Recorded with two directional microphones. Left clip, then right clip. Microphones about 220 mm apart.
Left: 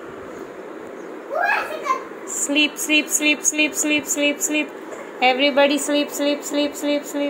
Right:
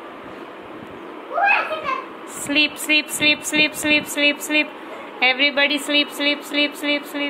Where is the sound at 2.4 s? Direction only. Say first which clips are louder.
Right 1 dB; 10° left (ahead or behind).